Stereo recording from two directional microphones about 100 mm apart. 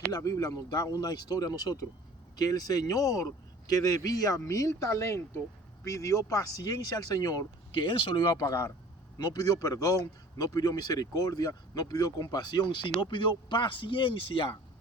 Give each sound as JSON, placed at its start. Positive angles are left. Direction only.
{"t": 0.1, "sound": "a man's voice", "side_deg": 35}